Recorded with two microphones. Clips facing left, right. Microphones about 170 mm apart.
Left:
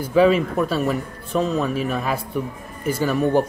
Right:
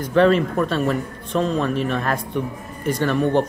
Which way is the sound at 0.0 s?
5° left (ahead or behind).